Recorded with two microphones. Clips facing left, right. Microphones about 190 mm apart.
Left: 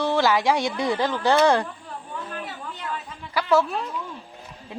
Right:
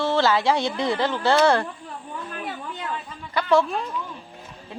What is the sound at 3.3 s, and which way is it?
Speech, 5° left (ahead or behind).